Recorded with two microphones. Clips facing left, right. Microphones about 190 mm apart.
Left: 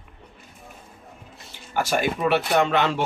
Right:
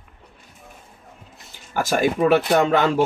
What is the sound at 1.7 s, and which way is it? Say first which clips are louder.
Speech: right 3 dB; 45° right (ahead or behind).